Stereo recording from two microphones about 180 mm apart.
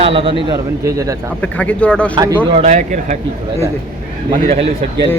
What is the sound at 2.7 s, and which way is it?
Speech, 40° right (ahead or behind).